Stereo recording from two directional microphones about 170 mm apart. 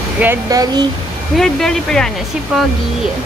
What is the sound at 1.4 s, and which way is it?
Speech, 5° left (ahead or behind).